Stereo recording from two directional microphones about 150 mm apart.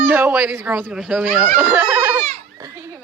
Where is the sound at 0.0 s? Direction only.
15° right (ahead or behind).